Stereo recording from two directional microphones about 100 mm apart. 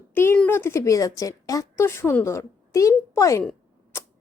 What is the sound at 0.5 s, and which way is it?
A woman's voice, 30° left (ahead or behind).